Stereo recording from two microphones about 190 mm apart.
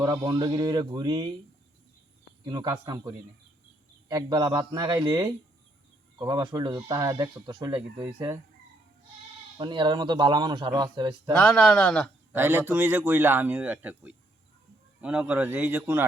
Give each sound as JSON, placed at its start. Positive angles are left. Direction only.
{"t": 0.0, "sound": "speech", "side_deg": -20}
{"t": 2.4, "sound": "speech", "side_deg": -20}
{"t": 9.6, "sound": "speech", "side_deg": -25}
{"t": 11.3, "sound": "speech", "side_deg": 5}
{"t": 12.3, "sound": "a man's voice", "side_deg": -10}